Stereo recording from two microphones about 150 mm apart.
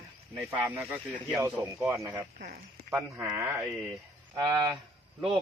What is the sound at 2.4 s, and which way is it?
Speech, 60° right (ahead or behind).